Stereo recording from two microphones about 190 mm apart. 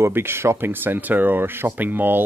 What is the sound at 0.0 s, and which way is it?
Speech, 10° right (ahead or behind).